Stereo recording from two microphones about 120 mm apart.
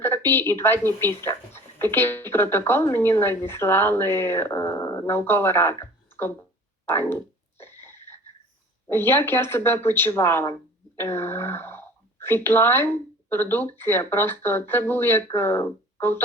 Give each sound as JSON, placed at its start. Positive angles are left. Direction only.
{"t": 0.0, "sound": "a woman's voice", "side_deg": 20}
{"t": 7.6, "sound": "wheeze", "side_deg": 20}
{"t": 8.9, "sound": "speech", "side_deg": 20}